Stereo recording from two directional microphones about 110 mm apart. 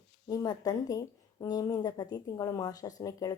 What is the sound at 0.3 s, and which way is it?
A woman's voice, 35° left (ahead or behind).